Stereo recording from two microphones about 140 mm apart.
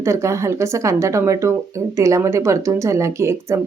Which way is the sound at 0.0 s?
20° right (ahead or behind).